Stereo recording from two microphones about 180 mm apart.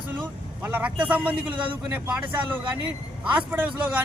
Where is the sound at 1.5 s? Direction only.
25° right (ahead or behind).